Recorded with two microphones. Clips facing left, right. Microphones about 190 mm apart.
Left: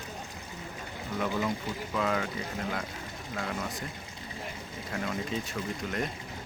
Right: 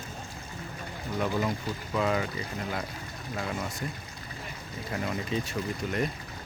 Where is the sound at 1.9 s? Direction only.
10° right (ahead or behind).